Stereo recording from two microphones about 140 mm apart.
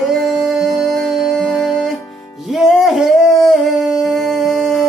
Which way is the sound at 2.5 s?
Centre (ahead or behind).